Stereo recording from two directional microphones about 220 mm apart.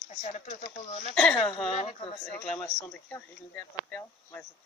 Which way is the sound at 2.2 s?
5° left (ahead or behind).